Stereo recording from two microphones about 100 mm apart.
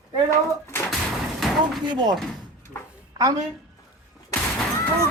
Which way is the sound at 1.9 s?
45° right (ahead or behind).